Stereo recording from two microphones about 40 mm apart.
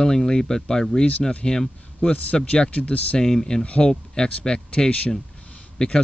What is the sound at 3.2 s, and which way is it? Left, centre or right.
Speech, centre.